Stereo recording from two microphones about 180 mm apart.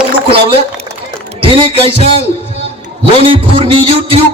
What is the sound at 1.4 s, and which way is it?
Music, 30° right (ahead or behind).